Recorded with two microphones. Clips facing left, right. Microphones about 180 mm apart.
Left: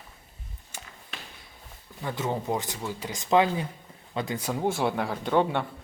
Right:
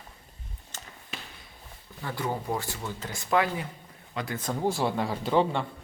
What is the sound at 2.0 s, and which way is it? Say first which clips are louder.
Speech: left 2 dB; 20° left (ahead or behind).